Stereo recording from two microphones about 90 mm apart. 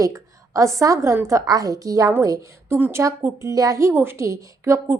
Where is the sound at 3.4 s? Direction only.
40° right (ahead or behind).